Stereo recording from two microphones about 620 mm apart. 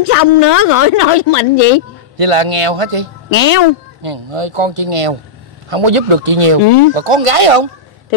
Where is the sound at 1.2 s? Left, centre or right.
Left.